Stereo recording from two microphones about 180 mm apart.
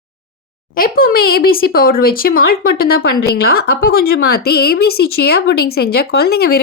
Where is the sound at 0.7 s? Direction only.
50° left (ahead or behind).